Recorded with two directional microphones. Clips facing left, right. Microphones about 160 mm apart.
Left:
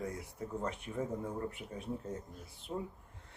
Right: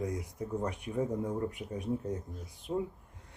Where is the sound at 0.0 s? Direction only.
15° right (ahead or behind).